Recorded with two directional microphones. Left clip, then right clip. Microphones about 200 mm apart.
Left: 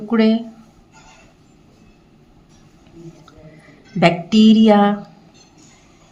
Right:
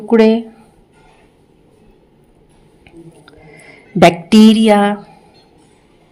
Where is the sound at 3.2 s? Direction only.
40° right (ahead or behind).